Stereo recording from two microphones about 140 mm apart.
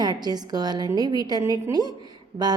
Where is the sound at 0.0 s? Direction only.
30° right (ahead or behind).